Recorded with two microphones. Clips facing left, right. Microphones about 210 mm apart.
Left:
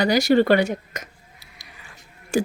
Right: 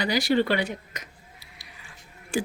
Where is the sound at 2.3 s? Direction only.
45° left (ahead or behind).